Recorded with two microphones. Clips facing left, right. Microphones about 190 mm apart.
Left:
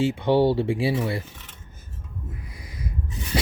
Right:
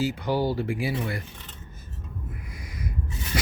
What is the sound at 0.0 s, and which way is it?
Speech, 25° left (ahead or behind).